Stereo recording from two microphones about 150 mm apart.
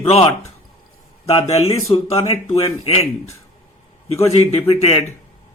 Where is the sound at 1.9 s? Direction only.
45° left (ahead or behind).